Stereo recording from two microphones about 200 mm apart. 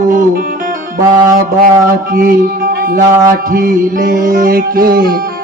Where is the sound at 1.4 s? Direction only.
45° right (ahead or behind).